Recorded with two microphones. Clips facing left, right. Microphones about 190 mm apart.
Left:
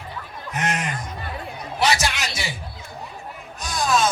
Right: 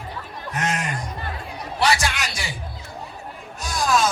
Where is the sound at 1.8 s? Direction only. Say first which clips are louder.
Even; 20° left (ahead or behind).